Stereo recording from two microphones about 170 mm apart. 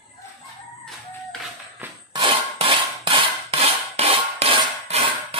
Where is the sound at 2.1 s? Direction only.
30° right (ahead or behind).